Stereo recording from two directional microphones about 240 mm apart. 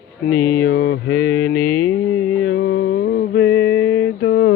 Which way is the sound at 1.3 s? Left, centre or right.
Centre.